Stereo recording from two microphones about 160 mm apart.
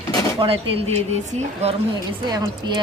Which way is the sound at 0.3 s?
35° right (ahead or behind).